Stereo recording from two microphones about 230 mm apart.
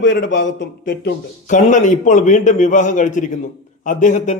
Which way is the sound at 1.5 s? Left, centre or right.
Left.